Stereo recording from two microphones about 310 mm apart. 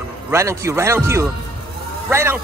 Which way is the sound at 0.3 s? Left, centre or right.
Centre.